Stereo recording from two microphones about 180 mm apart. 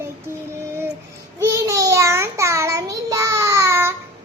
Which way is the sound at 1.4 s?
20° right (ahead or behind).